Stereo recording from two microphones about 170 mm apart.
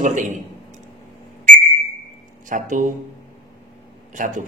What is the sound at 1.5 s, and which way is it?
Whistle, 45° right (ahead or behind).